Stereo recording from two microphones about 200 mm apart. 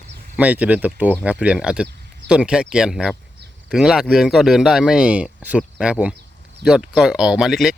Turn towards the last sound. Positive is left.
turn(degrees=0)  # may be behind; listen again after turning